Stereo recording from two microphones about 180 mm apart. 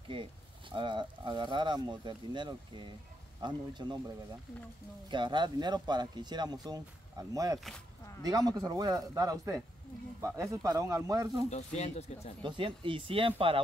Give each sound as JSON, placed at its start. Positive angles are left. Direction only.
{"t": 0.1, "sound": "speech", "side_deg": -30}
{"t": 5.1, "sound": "speech", "side_deg": -25}
{"t": 11.5, "sound": "speech", "side_deg": 40}
{"t": 12.4, "sound": "speech", "side_deg": -30}